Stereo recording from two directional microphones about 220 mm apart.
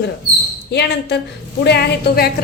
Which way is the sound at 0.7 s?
50° left (ahead or behind).